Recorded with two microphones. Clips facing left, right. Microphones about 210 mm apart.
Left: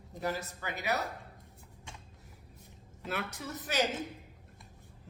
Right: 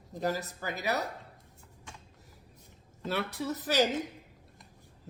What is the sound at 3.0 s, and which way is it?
Speech, 35° right (ahead or behind).